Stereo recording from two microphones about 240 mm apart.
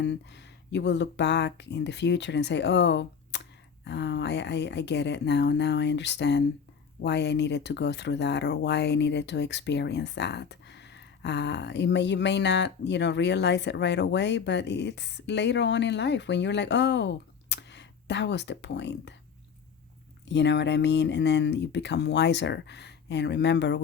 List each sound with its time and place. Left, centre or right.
0.0 s speech: left
20.2 s speech: left